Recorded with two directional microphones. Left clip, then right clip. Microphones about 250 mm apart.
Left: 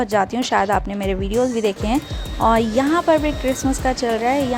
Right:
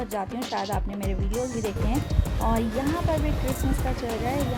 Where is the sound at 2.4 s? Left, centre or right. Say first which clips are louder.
Left 11 dB; left.